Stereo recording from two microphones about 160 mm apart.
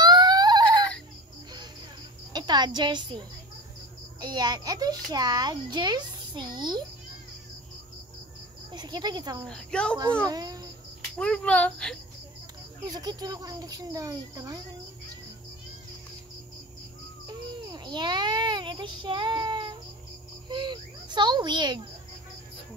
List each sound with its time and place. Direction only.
0.0 s a sound: 25° right (ahead or behind)
0.7 s a sound: 5° left (ahead or behind)
2.3 s a woman's voice: 25° right (ahead or behind)
8.7 s speech: 25° right (ahead or behind)
9.5 s a woman's voice: 5° left (ahead or behind)
10.2 s speech: 25° right (ahead or behind)
11.1 s speech: 5° left (ahead or behind)
12.8 s speech: 25° right (ahead or behind)
17.3 s babbling: 25° right (ahead or behind)
20.4 s a child's voice: 30° right (ahead or behind)